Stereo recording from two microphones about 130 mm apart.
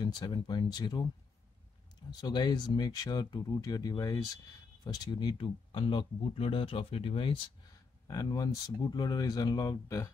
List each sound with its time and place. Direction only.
0.0 s speech: 35° left (ahead or behind)
2.0 s speech: 35° left (ahead or behind)
8.1 s speech: 30° left (ahead or behind)